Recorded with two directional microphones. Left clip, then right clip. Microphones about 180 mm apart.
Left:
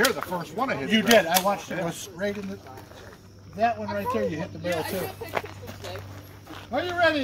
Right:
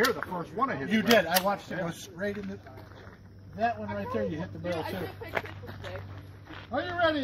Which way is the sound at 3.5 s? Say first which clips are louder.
Left 5 dB; 15° left (ahead or behind).